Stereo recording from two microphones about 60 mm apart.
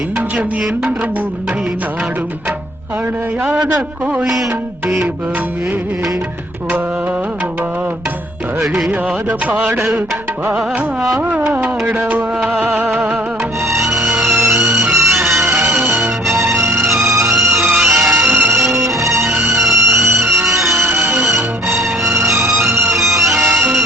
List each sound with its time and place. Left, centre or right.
4.0 s music: centre
8.9 s music: right
11.9 s music: right
12.9 s music: centre
13.7 s music: centre